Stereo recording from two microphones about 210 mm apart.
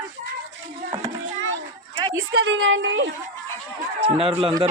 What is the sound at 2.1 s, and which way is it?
A woman's voice, 55° right (ahead or behind).